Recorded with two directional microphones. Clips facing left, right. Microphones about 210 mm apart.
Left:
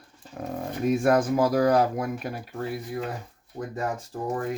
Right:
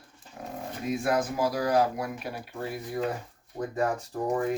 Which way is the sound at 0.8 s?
50° left (ahead or behind).